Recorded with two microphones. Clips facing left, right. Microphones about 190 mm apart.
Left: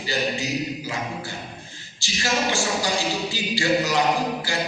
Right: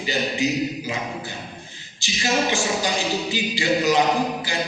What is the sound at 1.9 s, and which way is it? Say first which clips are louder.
Speech: right 2 dB; 20° right (ahead or behind).